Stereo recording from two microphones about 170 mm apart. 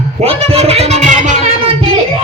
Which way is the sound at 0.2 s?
35° right (ahead or behind).